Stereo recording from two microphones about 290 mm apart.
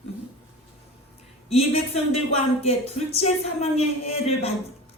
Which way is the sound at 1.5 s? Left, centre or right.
Left.